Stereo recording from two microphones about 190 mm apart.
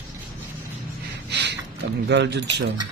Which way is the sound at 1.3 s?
65° right (ahead or behind).